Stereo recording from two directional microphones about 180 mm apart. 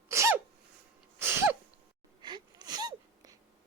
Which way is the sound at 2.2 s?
25° right (ahead or behind).